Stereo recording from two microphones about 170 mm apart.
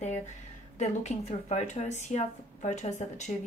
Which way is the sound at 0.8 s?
40° left (ahead or behind).